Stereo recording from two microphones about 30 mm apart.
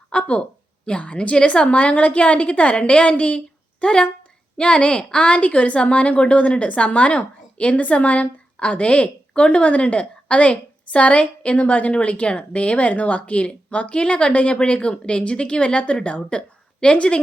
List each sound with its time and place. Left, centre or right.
0.1 s a woman's voice: left
3.8 s a woman's voice: left